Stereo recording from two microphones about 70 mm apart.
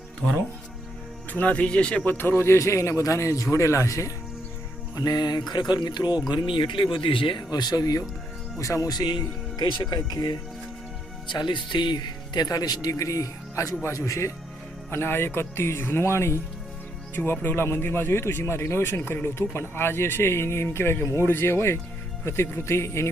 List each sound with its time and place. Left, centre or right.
1.3 s speech: left
2.1 s a man's voice: left
4.9 s music: left
7.3 s speech: left
8.5 s a man's voice: left
8.9 s speech: left
9.6 s music: left
11.3 s a man's voice: left